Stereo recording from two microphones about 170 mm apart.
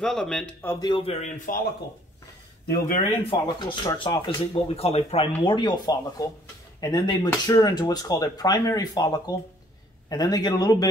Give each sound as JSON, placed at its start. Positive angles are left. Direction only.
{"t": 0.0, "sound": "speech", "side_deg": 0}
{"t": 0.7, "sound": "a man's voice", "side_deg": 25}
{"t": 3.3, "sound": "a man's voice", "side_deg": 30}